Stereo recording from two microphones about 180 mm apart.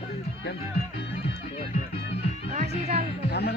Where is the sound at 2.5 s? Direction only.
40° right (ahead or behind).